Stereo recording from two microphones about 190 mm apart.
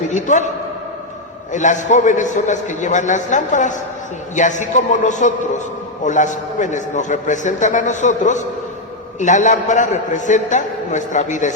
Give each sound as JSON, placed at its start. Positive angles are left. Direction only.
{"t": 0.1, "sound": "a man's voice", "side_deg": 40}
{"t": 1.5, "sound": "a man's voice", "side_deg": 40}